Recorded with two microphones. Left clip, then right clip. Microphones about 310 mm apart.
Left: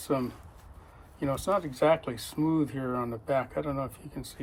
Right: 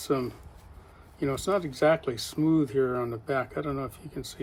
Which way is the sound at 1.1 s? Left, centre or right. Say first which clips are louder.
Right 1 dB; centre.